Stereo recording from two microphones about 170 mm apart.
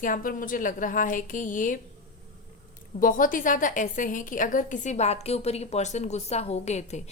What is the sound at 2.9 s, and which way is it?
A woman's voice, 55° left (ahead or behind).